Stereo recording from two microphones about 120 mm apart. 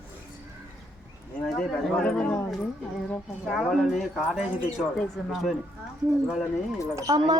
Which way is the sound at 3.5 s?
Centre (ahead or behind).